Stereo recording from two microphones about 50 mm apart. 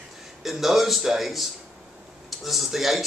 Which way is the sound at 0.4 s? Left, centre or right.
Centre.